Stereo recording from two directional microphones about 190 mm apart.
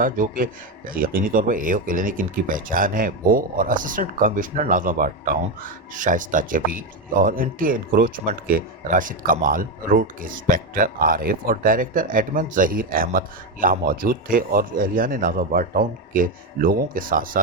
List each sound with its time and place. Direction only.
0.0 s speech: 45° right (ahead or behind)